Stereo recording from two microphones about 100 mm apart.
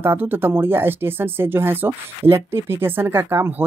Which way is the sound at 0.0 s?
20° right (ahead or behind).